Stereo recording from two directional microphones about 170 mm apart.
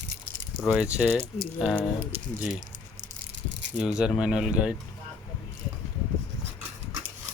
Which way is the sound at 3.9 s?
5° right (ahead or behind).